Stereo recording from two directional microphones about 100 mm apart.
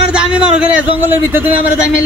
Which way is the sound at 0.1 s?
10° right (ahead or behind).